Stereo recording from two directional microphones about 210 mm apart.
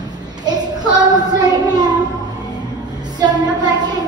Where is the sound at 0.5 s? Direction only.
20° right (ahead or behind).